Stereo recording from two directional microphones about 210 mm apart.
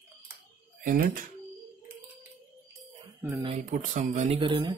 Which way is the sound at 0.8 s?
45° right (ahead or behind).